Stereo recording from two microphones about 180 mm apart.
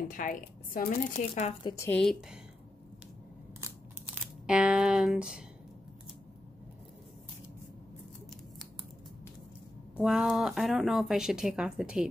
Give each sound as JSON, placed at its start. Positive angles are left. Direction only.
{"t": 0.1, "sound": "speech", "side_deg": 50}
{"t": 1.6, "sound": "speech", "side_deg": 25}
{"t": 1.9, "sound": "speech", "side_deg": 5}
{"t": 4.5, "sound": "speech", "side_deg": -5}
{"t": 9.9, "sound": "speech", "side_deg": -5}